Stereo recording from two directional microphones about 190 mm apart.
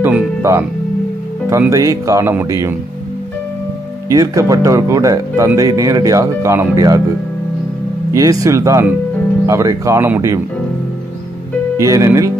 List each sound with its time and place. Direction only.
0.0 s speech: 15° right (ahead or behind)
4.1 s speech: 20° right (ahead or behind)
8.1 s speech: 20° right (ahead or behind)
11.8 s speech: 15° right (ahead or behind)